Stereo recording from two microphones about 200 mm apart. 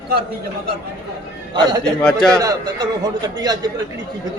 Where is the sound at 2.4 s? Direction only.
20° right (ahead or behind).